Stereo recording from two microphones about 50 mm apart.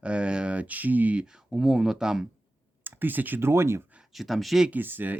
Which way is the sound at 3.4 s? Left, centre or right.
Right.